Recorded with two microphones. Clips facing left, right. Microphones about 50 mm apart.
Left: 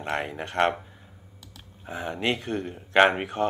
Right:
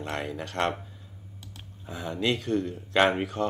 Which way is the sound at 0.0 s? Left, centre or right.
Left.